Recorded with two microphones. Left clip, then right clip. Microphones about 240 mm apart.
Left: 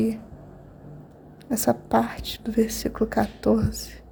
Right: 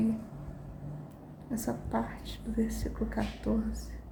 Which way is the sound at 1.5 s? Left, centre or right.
Left.